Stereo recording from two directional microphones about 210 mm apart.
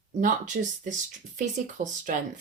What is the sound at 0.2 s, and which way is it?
Speech, 40° right (ahead or behind).